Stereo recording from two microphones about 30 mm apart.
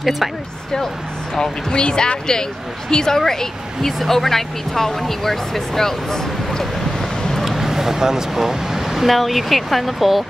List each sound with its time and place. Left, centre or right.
1.4 s speech: left
7.4 s speech: centre